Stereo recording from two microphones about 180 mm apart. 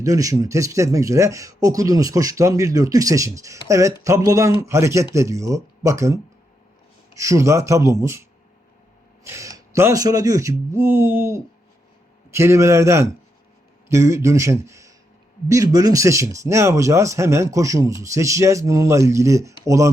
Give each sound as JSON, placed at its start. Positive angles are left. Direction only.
{"t": 0.0, "sound": "speech", "side_deg": -20}
{"t": 9.2, "sound": "speech", "side_deg": -15}